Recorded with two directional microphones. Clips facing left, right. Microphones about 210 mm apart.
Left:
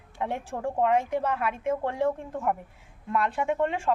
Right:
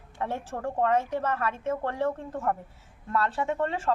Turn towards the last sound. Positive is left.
turn(degrees=15)  # may be behind; listen again after turning